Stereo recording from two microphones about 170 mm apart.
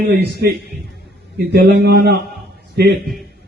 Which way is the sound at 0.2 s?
75° right (ahead or behind).